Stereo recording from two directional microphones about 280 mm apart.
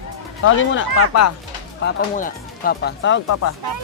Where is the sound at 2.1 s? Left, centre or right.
Left.